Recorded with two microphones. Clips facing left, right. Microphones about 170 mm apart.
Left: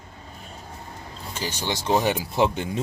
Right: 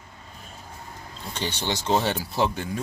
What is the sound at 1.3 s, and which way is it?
Speech, 10° left (ahead or behind).